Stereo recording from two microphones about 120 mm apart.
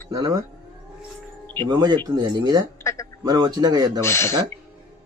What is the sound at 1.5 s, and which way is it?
Speech, 35° right (ahead or behind).